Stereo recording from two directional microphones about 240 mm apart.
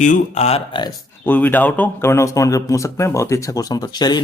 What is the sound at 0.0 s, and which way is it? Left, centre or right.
Speech, left.